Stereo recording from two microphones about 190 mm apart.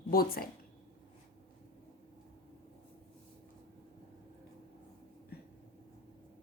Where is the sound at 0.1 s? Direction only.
50° left (ahead or behind).